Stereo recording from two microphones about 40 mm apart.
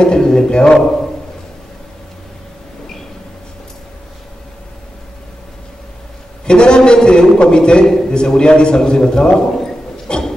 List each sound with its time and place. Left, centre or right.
0.0 s a man's voice: left
6.4 s a man's voice: left
10.0 s a sound: left